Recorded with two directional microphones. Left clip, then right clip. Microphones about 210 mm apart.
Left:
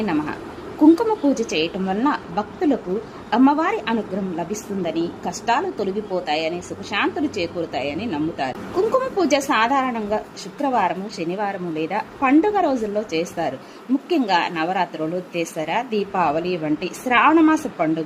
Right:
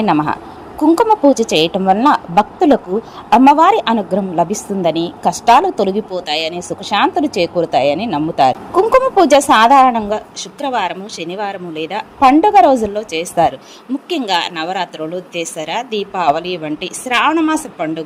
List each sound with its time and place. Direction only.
0.0 s a woman's voice: 20° right (ahead or behind)
7.9 s speech: 90° right
8.1 s a woman's voice: 20° right (ahead or behind)